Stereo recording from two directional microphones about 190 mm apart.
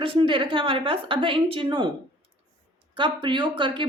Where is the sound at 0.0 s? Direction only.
25° right (ahead or behind).